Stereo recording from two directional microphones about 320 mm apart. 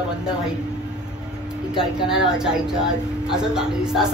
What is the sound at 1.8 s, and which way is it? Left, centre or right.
A woman's voice, centre.